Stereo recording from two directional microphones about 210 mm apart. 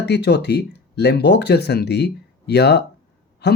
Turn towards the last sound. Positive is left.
turn(degrees=50)  # may be behind; listen again after turning